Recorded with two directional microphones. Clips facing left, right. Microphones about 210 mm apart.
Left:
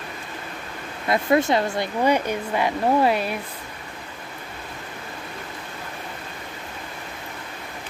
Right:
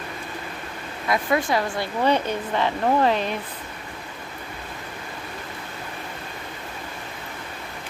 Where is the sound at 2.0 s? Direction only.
10° left (ahead or behind).